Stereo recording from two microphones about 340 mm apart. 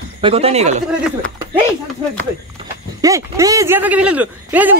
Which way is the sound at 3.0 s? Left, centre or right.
Centre.